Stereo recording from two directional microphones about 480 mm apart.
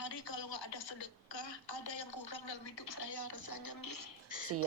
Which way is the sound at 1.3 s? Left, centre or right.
Left.